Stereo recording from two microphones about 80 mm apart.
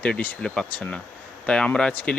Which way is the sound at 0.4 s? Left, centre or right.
Centre.